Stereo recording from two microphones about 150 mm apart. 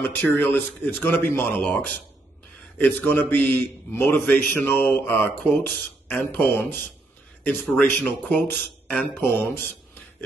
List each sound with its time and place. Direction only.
0.0 s a man's voice: 15° left (ahead or behind)
3.0 s a man's voice: 10° left (ahead or behind)